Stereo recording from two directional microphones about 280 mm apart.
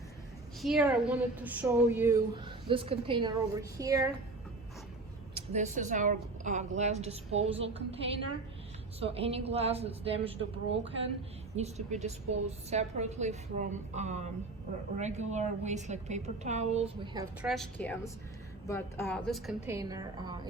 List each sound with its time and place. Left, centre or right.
0.6 s a woman's voice: centre
5.3 s a woman's voice: right
9.0 s a woman's voice: right
11.5 s a woman's voice: right
17.4 s a woman's voice: centre